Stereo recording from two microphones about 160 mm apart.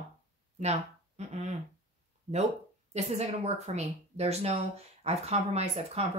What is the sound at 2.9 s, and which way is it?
Speech, 40° right (ahead or behind).